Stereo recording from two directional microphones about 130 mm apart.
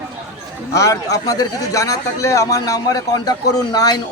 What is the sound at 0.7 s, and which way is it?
Speech, 25° left (ahead or behind).